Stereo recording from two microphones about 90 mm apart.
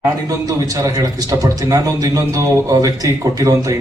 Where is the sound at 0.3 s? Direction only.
40° right (ahead or behind).